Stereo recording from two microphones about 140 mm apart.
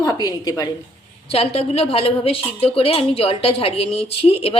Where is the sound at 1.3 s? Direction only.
45° left (ahead or behind).